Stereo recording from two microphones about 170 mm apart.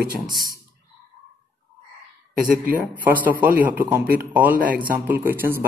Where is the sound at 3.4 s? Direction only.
10° right (ahead or behind).